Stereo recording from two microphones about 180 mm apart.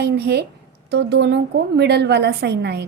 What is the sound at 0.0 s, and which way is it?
A woman's voice, 65° right (ahead or behind).